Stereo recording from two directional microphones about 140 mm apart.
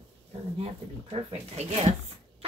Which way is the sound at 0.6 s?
45° right (ahead or behind).